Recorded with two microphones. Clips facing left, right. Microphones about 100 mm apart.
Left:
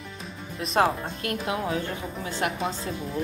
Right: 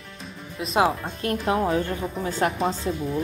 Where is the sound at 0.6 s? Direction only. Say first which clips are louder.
Right 1 dB; 5° right (ahead or behind).